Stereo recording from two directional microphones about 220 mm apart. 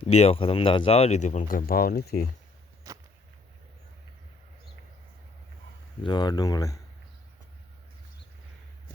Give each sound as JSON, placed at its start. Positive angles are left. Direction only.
{"t": 0.0, "sound": "speech", "side_deg": 30}
{"t": 2.8, "sound": "a sound", "side_deg": -15}
{"t": 6.0, "sound": "speech", "side_deg": 20}